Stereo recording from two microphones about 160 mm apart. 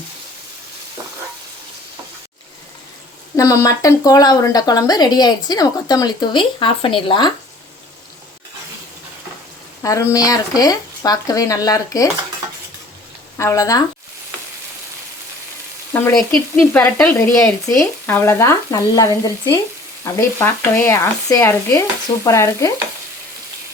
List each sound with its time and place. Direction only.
3.3 s speech: 20° left (ahead or behind)
9.8 s speech: 20° left (ahead or behind)
13.3 s speech: 20° left (ahead or behind)
16.6 s speech: 15° left (ahead or behind)